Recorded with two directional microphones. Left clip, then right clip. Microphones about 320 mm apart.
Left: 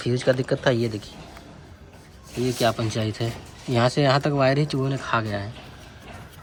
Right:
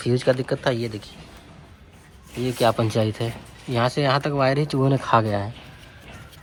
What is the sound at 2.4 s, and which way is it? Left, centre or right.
Speech, centre.